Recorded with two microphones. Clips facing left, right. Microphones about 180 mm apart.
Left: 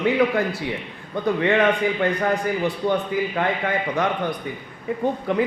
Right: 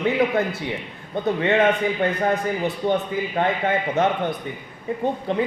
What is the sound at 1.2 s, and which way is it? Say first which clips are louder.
Speech: left 1 dB; 25° right (ahead or behind).